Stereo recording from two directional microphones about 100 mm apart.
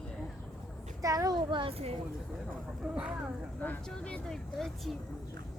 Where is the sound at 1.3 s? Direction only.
55° right (ahead or behind); by 1.9 s 75° right (ahead or behind).